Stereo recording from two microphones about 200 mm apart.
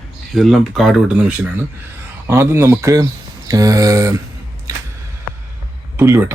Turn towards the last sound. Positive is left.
turn(degrees=-10)  # may be behind; listen again after turning